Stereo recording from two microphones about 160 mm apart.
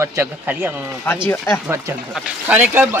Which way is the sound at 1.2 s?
10° left (ahead or behind).